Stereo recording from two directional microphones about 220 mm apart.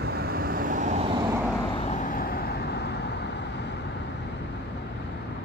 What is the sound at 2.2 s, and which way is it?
Vehicle, 45° left (ahead or behind).